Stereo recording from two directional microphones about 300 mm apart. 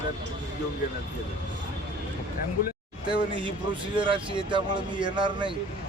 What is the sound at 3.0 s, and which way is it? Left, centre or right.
Speech, centre.